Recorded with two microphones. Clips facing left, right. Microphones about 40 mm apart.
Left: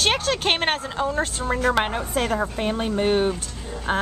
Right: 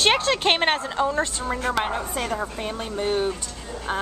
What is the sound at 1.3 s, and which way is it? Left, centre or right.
Speech, centre.